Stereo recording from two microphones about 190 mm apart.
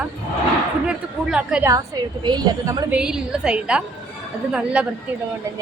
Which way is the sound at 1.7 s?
20° right (ahead or behind).